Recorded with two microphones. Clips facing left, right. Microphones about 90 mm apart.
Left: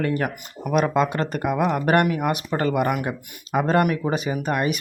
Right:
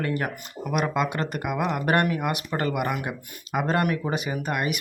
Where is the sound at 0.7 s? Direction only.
30° left (ahead or behind).